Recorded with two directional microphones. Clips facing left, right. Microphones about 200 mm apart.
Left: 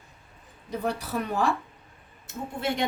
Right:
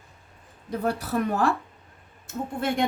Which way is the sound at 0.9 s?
55° right (ahead or behind).